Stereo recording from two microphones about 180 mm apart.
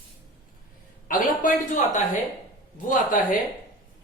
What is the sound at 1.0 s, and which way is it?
Speech, 50° left (ahead or behind).